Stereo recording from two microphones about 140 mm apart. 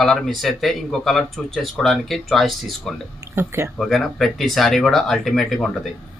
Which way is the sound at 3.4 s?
20° right (ahead or behind).